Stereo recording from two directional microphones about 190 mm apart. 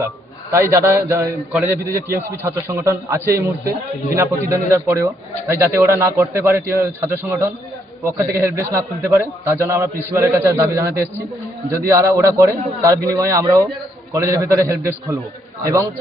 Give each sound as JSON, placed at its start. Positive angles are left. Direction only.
{"t": 0.5, "sound": "a man's voice", "side_deg": -15}